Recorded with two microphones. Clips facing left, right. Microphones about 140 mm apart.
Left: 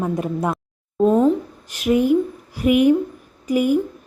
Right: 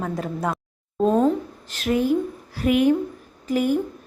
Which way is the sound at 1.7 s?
15° left (ahead or behind).